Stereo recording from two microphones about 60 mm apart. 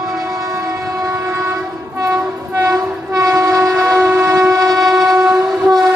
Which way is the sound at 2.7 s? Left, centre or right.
Right.